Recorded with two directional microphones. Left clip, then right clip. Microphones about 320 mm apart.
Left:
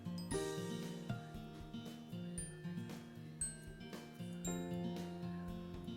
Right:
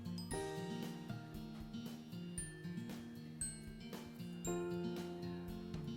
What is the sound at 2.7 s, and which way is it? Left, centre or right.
Music, centre.